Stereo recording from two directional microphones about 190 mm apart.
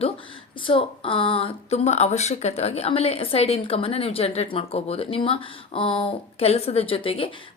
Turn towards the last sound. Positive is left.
turn(degrees=30)  # may be behind; listen again after turning